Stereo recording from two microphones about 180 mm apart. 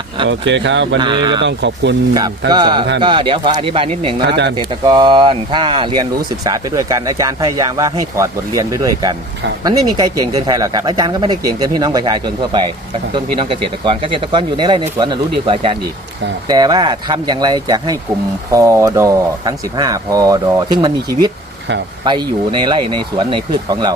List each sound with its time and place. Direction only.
0.3 s speech: 85° right
0.9 s speech: 25° right (ahead or behind)
1.4 s speech: 75° right (ahead or behind)
2.5 s speech: 25° right (ahead or behind)